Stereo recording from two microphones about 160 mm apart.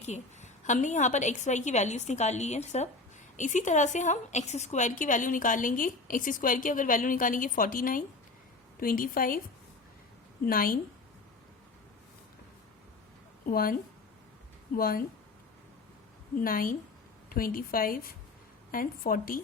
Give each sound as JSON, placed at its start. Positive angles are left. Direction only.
{"t": 0.0, "sound": "a woman's voice", "side_deg": 45}
{"t": 10.4, "sound": "speech", "side_deg": 65}
{"t": 13.4, "sound": "a woman's voice", "side_deg": 65}
{"t": 14.8, "sound": "speech", "side_deg": 65}
{"t": 16.4, "sound": "speech", "side_deg": 65}